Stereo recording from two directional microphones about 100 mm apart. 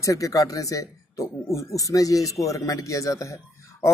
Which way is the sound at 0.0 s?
35° left (ahead or behind).